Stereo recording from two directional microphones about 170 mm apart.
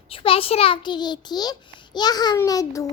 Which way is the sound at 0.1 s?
35° left (ahead or behind).